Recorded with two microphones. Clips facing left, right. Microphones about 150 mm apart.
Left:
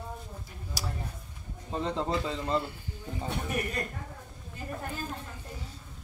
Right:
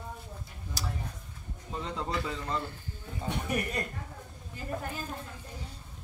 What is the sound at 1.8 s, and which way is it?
Speech, 30° left (ahead or behind).